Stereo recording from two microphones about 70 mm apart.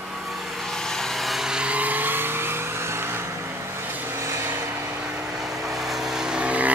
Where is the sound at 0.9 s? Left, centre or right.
Centre; by 2.5 s right.